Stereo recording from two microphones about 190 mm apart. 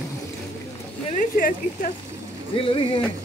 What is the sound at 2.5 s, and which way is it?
Speech, 30° left (ahead or behind).